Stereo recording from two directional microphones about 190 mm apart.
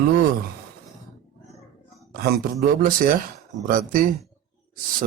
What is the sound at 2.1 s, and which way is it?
A man's voice, 55° right (ahead or behind).